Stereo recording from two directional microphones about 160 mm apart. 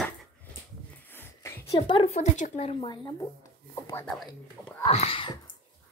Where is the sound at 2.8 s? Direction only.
25° left (ahead or behind).